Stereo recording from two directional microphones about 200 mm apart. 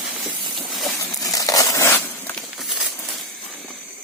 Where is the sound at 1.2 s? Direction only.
15° left (ahead or behind); by 2.9 s centre (ahead or behind).